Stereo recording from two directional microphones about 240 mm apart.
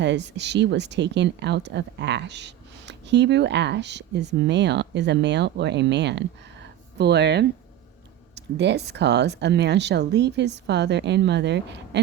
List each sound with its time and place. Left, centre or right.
0.0 s speech: right